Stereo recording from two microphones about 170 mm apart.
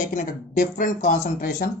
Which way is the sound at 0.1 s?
50° left (ahead or behind).